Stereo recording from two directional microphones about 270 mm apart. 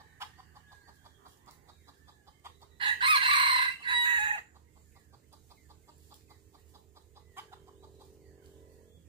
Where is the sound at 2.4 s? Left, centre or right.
Centre.